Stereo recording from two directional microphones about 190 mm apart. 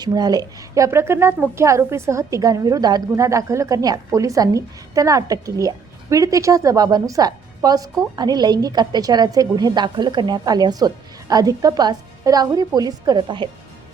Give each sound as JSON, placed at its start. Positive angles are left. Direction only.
{"t": 0.0, "sound": "a woman's voice", "side_deg": -20}